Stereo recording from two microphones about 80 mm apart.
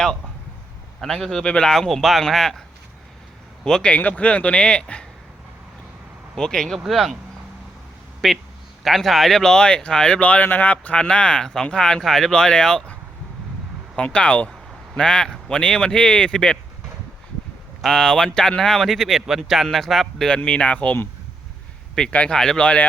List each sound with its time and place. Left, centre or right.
1.0 s a man's voice: centre
3.6 s speech: centre
6.3 s a man's voice: centre
8.2 s a man's voice: centre
17.8 s speech: centre; by 21.1 s left
22.1 s speech: centre